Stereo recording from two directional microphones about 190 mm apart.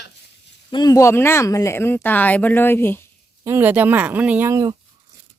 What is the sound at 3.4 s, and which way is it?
Speech, 10° right (ahead or behind).